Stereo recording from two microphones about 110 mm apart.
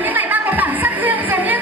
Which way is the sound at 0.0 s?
15° right (ahead or behind).